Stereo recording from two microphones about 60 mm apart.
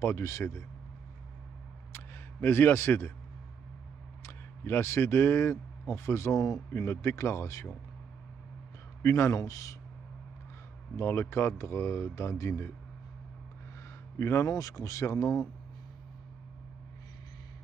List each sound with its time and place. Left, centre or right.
0.0 s speech: left
1.9 s single-lens reflex camera: left
4.2 s speech: left
6.8 s speech: left
9.0 s speech: left
11.0 s speech: left
14.1 s a man's voice: left
14.4 s speech: left